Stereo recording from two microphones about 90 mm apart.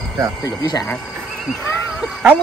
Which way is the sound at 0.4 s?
40° left (ahead or behind).